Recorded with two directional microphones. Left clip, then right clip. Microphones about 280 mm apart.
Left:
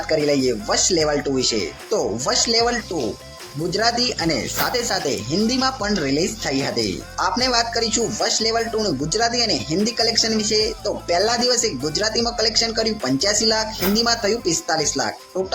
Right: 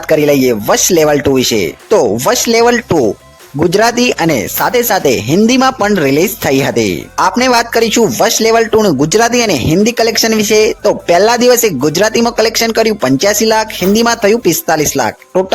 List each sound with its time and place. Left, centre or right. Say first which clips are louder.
0.1 s speech: right 10 dB; right